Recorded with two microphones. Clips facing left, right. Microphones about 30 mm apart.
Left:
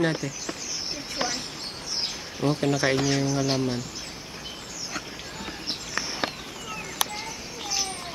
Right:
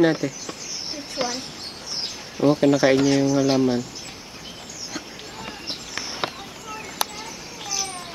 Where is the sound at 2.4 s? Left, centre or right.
Centre.